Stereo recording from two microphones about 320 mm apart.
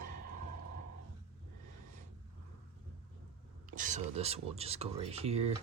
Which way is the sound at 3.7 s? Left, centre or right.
Right.